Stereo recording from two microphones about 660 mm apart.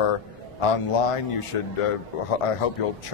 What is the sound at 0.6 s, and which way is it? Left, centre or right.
A man's voice, left.